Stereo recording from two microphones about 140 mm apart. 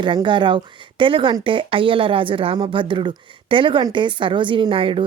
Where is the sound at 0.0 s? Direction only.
35° right (ahead or behind).